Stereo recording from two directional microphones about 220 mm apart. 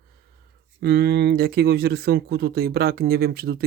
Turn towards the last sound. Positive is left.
turn(degrees=-45)  # may be behind; listen again after turning